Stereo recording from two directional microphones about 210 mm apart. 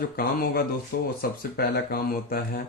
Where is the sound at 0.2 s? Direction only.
45° left (ahead or behind).